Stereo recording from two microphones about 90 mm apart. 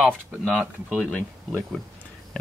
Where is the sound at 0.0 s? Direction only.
Centre (ahead or behind).